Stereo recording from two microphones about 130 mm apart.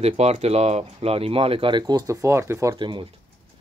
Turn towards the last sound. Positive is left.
turn(degrees=-40)  # may be behind; listen again after turning